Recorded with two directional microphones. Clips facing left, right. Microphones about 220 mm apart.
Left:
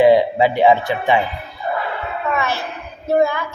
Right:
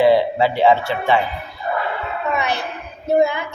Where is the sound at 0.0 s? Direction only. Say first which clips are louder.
Left 2 dB; 15° left (ahead or behind).